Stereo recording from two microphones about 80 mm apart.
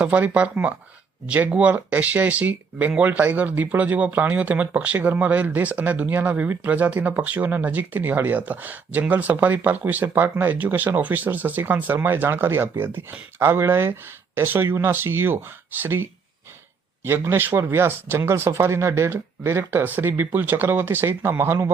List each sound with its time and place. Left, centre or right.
0.0 s speech: centre; by 21.7 s right